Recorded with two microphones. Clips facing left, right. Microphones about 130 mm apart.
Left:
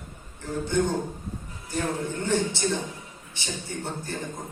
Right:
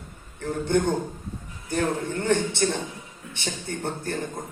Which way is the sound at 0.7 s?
55° right (ahead or behind).